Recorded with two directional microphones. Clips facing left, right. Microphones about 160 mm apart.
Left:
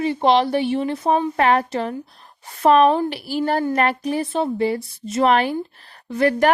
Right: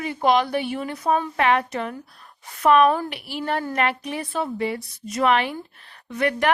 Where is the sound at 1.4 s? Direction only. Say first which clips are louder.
Left 3 dB; 40° left (ahead or behind).